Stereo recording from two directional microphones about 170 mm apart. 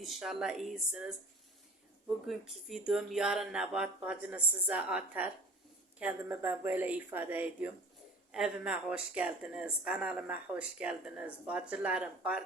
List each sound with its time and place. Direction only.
0.0 s speech: centre (ahead or behind)
2.2 s speech: centre (ahead or behind)